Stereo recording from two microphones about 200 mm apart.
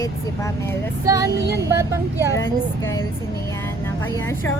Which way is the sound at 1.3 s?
55° right (ahead or behind).